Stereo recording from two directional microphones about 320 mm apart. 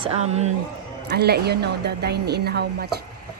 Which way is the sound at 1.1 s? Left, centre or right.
Right.